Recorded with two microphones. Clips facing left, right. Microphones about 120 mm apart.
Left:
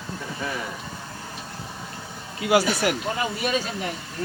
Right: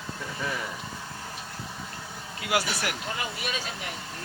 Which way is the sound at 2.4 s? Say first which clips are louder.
Left 8 dB; 30° left (ahead or behind).